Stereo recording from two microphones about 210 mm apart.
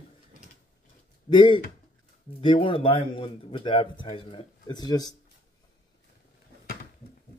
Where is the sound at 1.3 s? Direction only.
25° left (ahead or behind).